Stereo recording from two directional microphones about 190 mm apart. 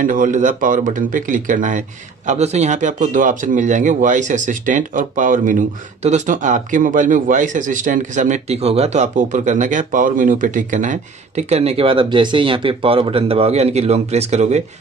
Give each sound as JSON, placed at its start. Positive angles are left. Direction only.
{"t": 0.0, "sound": "speech", "side_deg": -45}